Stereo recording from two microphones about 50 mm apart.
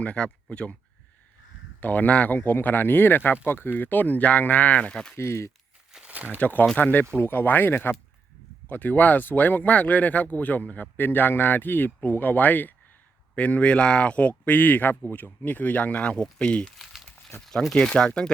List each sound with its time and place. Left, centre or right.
0.0 s speech: left
1.8 s speech: left; by 5.1 s centre
5.1 s speech: left
6.1 s a sound: right
6.7 s speech: left; by 16.7 s centre
17.4 s speech: centre